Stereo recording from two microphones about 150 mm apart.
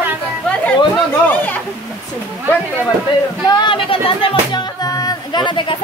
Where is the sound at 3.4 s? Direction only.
30° left (ahead or behind).